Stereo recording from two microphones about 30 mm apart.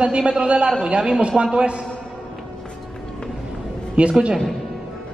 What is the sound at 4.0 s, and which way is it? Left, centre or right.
Speech, right.